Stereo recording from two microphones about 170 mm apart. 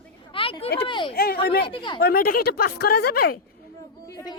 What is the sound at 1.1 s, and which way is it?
Speech, 65° left (ahead or behind).